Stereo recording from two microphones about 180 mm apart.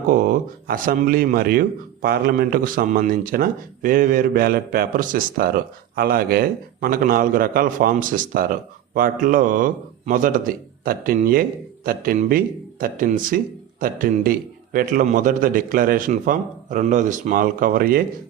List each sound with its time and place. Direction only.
0.1 s speech: 50° right (ahead or behind)